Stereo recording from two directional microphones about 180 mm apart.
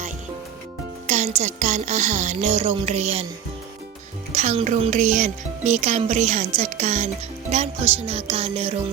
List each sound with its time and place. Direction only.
1.0 s speech: 40° right (ahead or behind)
4.3 s speech: 40° right (ahead or behind)